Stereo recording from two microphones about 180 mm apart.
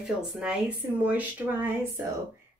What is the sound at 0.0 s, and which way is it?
Speech, 5° right (ahead or behind).